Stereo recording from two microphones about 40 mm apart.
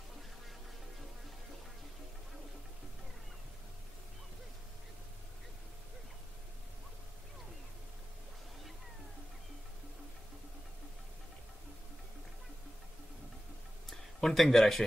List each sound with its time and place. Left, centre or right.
13.8 s speech: centre